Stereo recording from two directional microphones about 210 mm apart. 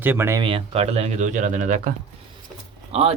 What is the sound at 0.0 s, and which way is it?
Speech, 10° right (ahead or behind).